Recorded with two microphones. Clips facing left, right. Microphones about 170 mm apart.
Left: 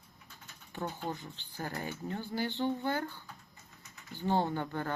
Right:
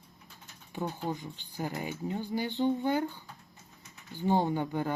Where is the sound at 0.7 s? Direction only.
15° right (ahead or behind).